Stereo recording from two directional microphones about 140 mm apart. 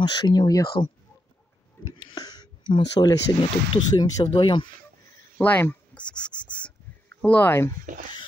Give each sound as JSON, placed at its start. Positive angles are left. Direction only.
{"t": 0.0, "sound": "speech", "side_deg": 30}
{"t": 2.1, "sound": "speech", "side_deg": 30}
{"t": 5.4, "sound": "speech", "side_deg": 15}